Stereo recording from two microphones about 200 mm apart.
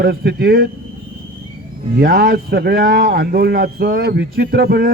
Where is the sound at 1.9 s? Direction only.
50° right (ahead or behind).